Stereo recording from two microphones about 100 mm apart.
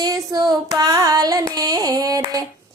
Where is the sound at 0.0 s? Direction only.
40° right (ahead or behind).